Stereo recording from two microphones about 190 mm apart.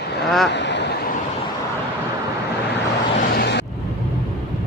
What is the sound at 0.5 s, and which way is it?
Vehicle, 65° left (ahead or behind).